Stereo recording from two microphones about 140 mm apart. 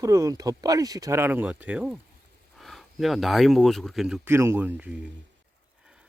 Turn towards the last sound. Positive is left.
turn(degrees=-10)  # may be behind; listen again after turning